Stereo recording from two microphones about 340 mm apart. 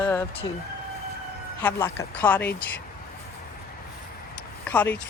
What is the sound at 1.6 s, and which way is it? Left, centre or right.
Speech, centre.